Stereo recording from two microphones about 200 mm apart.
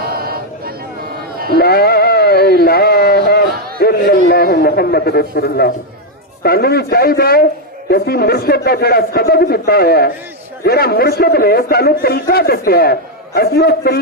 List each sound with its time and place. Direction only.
0.0 s a sound: 50° right (ahead or behind)
1.5 s sheep: 50° left (ahead or behind)
6.4 s a man's voice: 50° left (ahead or behind)